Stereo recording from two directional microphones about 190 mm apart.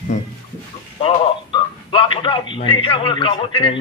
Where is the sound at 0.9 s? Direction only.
25° left (ahead or behind).